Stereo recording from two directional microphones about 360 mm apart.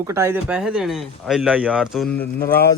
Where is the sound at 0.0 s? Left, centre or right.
Centre.